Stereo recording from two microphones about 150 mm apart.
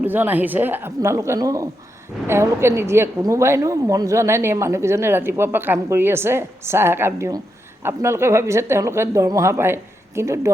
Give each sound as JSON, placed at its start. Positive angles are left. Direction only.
{"t": 0.0, "sound": "a woman's voice", "side_deg": -10}